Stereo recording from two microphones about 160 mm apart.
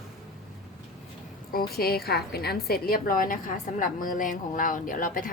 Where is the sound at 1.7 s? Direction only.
75° left (ahead or behind); by 5.2 s 55° left (ahead or behind).